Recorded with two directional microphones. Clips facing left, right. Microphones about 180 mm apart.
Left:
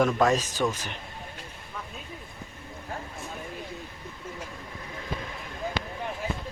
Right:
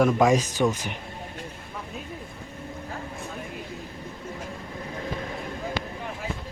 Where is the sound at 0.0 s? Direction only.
10° right (ahead or behind).